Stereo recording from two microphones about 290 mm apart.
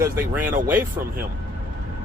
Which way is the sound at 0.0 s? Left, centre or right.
Centre.